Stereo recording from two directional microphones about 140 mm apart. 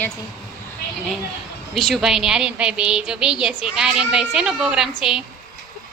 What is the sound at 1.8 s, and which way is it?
A woman's voice, centre (ahead or behind).